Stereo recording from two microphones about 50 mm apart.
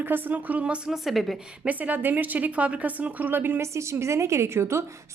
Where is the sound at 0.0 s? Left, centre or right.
Right.